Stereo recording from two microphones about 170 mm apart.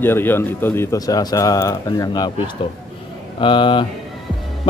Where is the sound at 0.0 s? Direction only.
10° left (ahead or behind).